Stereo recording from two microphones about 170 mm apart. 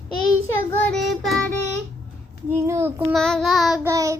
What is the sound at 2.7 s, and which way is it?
Child singing, 15° right (ahead or behind).